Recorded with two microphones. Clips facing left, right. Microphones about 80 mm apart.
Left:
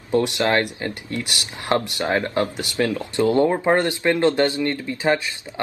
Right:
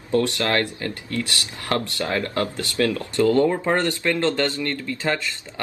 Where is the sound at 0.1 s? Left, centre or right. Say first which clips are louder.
Left 2 dB; left.